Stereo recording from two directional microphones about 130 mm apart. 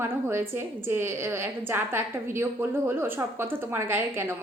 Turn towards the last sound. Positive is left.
turn(degrees=-20)  # may be behind; listen again after turning